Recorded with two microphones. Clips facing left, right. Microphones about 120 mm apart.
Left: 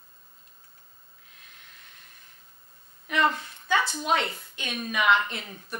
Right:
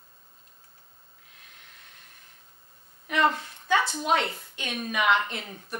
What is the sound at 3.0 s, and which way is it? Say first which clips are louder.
Speech: right 1 dB; 40° right (ahead or behind).